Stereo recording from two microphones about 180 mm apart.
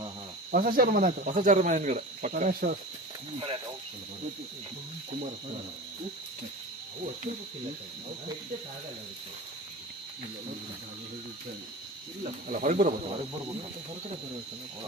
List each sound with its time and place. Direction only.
0.5 s speech: 50° right (ahead or behind)
12.5 s speech: 45° right (ahead or behind)